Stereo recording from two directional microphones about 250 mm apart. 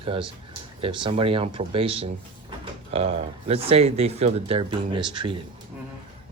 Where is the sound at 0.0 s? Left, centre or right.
Right.